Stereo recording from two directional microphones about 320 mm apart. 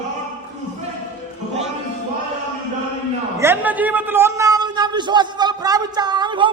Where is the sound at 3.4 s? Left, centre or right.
Centre.